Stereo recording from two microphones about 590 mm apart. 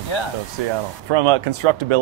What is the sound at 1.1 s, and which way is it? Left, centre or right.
Speech, right.